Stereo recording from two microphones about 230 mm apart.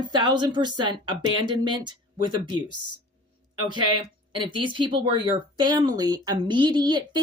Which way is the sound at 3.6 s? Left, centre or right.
Centre.